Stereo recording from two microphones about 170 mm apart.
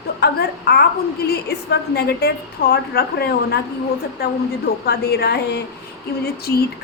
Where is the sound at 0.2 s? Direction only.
70° left (ahead or behind).